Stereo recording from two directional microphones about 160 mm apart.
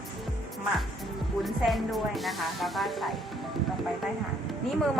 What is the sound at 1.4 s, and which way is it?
Speech, centre (ahead or behind).